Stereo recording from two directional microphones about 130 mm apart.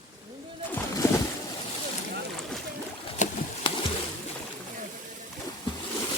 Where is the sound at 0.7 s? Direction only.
25° left (ahead or behind).